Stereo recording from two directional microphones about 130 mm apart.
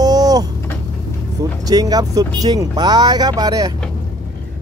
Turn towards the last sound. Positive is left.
turn(degrees=-30)  # may be behind; listen again after turning